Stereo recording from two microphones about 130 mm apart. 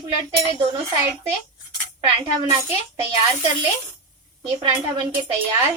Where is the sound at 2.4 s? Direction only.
30° right (ahead or behind).